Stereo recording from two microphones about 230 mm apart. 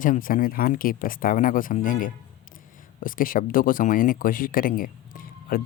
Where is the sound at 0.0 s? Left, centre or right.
Left.